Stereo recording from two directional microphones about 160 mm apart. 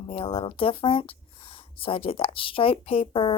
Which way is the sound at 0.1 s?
35° left (ahead or behind).